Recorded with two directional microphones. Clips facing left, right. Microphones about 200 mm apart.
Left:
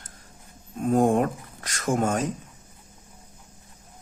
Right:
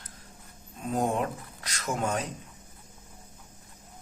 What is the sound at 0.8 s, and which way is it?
Speech, 50° left (ahead or behind).